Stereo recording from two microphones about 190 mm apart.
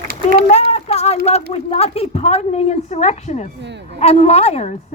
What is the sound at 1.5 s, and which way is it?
Speech, 35° left (ahead or behind).